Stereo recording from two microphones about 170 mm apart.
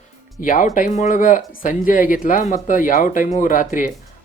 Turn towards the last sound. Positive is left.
turn(degrees=50)  # may be behind; listen again after turning